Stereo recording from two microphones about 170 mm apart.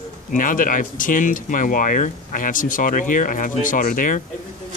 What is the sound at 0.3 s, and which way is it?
Speech, 50° left (ahead or behind).